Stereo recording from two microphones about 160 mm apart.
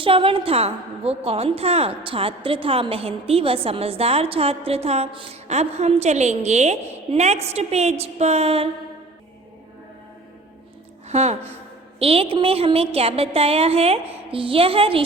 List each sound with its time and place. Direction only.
0.0 s a woman's voice: 35° right (ahead or behind)
11.1 s a woman's voice: 40° right (ahead or behind)